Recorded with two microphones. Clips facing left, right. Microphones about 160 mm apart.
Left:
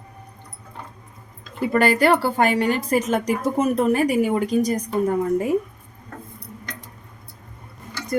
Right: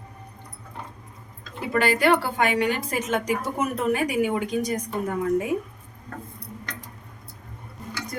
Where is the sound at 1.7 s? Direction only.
45° left (ahead or behind).